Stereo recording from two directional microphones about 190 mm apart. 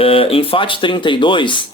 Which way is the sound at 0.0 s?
30° left (ahead or behind).